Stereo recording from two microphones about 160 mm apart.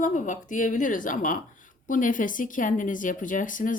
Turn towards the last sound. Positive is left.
turn(degrees=55)  # may be behind; listen again after turning